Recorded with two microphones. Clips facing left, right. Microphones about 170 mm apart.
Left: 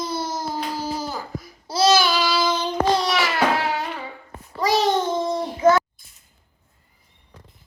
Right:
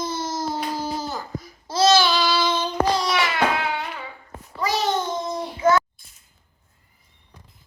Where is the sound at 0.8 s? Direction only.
10° left (ahead or behind).